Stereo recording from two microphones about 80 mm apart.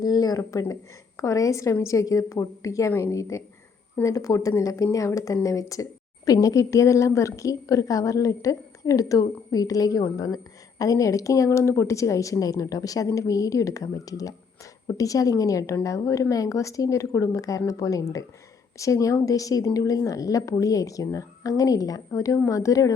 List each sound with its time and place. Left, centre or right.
0.0 s a woman's voice: left